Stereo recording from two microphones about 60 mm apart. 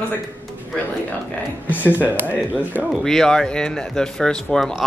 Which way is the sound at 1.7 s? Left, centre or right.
Left.